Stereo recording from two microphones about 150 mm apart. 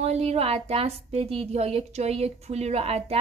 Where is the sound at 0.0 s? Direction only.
45° right (ahead or behind).